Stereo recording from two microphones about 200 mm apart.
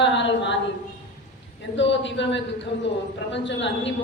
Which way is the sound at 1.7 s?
65° left (ahead or behind).